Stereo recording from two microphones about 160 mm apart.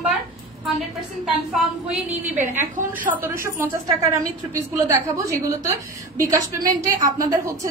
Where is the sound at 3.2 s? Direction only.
15° right (ahead or behind).